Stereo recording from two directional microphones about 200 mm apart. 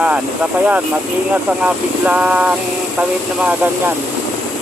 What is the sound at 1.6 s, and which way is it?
Speech, 5° right (ahead or behind).